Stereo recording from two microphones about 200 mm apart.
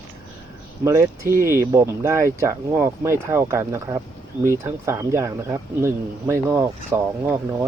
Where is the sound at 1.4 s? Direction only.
15° right (ahead or behind).